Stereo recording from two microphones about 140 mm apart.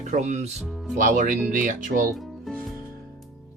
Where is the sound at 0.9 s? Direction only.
65° right (ahead or behind).